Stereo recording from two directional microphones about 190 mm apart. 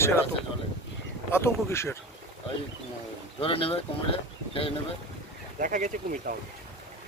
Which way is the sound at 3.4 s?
30° left (ahead or behind).